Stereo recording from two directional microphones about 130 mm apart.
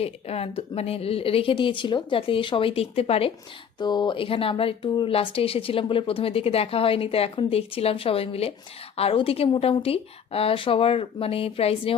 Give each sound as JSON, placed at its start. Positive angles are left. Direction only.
{"t": 0.0, "sound": "speech", "side_deg": 50}
{"t": 3.8, "sound": "speech", "side_deg": 35}